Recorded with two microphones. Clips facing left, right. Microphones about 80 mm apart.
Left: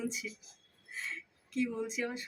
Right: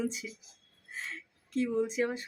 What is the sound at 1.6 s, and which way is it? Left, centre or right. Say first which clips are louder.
Speech: right 5 dB; right.